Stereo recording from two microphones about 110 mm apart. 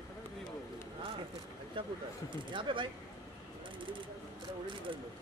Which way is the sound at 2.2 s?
50° right (ahead or behind).